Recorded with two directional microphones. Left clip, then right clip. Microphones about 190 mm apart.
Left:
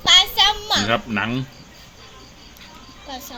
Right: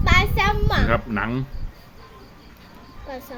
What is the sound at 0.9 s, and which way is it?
Speech, 20° left (ahead or behind).